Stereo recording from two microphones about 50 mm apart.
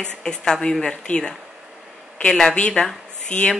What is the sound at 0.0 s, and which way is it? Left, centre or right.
Speech, centre.